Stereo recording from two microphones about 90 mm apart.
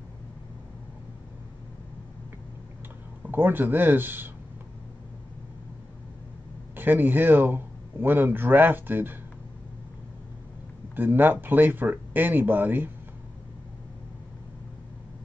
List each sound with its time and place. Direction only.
3.3 s a man's voice: 20° right (ahead or behind)
6.7 s a man's voice: 20° right (ahead or behind)
11.0 s a man's voice: 20° right (ahead or behind)